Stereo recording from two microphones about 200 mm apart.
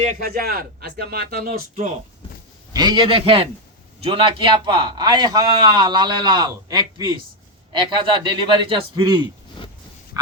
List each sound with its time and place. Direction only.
0.0 s speech: 45° right (ahead or behind)
2.7 s a man's voice: 20° right (ahead or behind)
9.6 s a sound: 25° left (ahead or behind)